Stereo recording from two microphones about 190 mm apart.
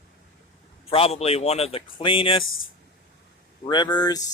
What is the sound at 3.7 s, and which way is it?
Speech, 25° left (ahead or behind).